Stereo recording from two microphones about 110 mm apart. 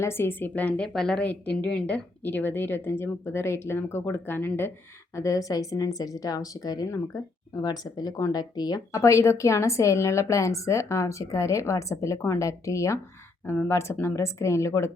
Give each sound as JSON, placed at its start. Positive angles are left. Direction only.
{"t": 0.0, "sound": "a woman's voice", "side_deg": 20}
{"t": 5.1, "sound": "speech", "side_deg": 30}